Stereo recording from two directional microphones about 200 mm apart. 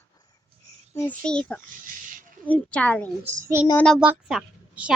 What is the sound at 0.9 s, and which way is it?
A child's voice, 5° left (ahead or behind).